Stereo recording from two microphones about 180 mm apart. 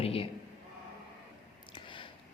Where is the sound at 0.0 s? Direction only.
30° left (ahead or behind).